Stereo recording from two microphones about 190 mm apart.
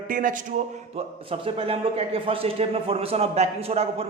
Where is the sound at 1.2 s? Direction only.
30° right (ahead or behind).